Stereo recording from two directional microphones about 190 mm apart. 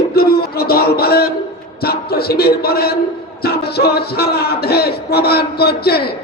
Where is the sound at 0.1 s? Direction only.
55° left (ahead or behind).